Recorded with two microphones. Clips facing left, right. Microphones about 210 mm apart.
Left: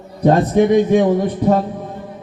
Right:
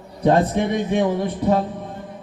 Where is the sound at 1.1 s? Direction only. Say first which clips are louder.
Left 5 dB; 45° left (ahead or behind).